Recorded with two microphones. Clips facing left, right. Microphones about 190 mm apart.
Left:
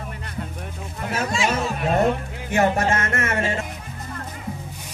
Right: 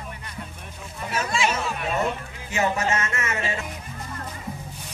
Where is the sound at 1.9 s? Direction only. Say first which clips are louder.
Left 8 dB; 55° left (ahead or behind).